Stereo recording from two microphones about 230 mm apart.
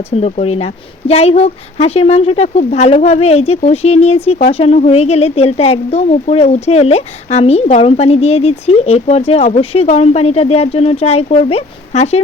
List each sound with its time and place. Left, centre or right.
0.1 s speech: left